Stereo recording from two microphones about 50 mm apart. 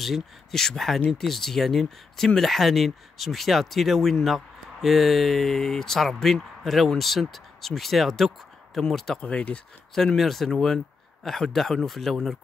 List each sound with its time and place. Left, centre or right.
0.0 s speech: centre
9.2 s speech: left
9.9 s speech: centre